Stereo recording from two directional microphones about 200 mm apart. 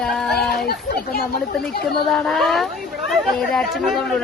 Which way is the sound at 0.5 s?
50° left (ahead or behind).